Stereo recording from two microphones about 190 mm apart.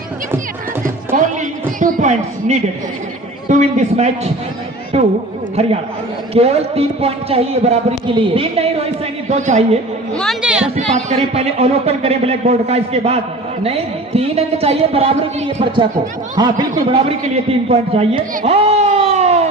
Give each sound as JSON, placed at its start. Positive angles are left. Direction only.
{"t": 1.1, "sound": "a sound", "side_deg": -45}
{"t": 3.5, "sound": "a man's voice", "side_deg": -40}
{"t": 6.3, "sound": "a man's voice", "side_deg": -30}
{"t": 10.2, "sound": "chatter", "side_deg": 0}
{"t": 10.8, "sound": "a man's voice", "side_deg": -35}